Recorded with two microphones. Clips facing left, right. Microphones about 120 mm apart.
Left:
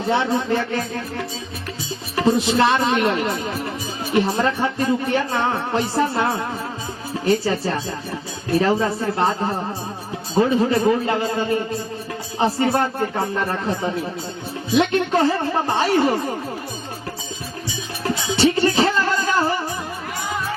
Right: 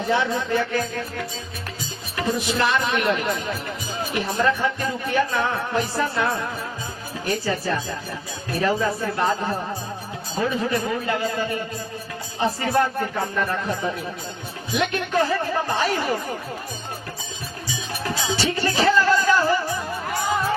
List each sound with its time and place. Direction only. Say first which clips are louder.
0.1 s speech: left 3 dB; 30° left (ahead or behind)
2.1 s speech: left 6 dB; 30° left (ahead or behind)
10.3 s speech: left 6 dB; 30° left (ahead or behind)
18.0 s music: left 6 dB; 25° left (ahead or behind)